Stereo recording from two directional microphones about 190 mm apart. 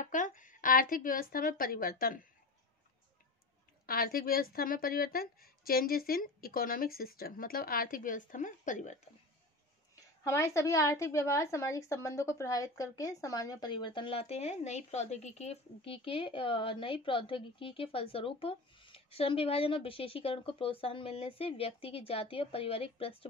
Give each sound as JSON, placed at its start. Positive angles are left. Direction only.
{"t": 0.0, "sound": "a woman's voice", "side_deg": 45}
{"t": 3.8, "sound": "a woman's voice", "side_deg": 50}
{"t": 9.9, "sound": "a woman's voice", "side_deg": 15}